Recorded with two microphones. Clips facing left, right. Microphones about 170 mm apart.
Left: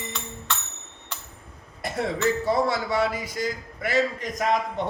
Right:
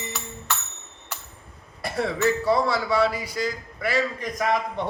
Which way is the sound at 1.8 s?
20° left (ahead or behind).